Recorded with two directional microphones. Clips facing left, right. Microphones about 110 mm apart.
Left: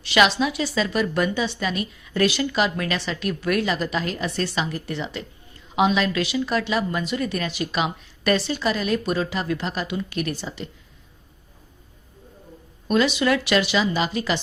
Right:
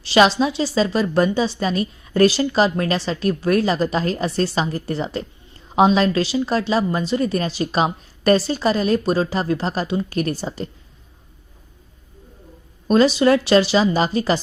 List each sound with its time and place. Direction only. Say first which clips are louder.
0.0 s a woman's voice: right 4 dB; 30° right (ahead or behind)
12.9 s a woman's voice: right 6 dB; 35° right (ahead or behind)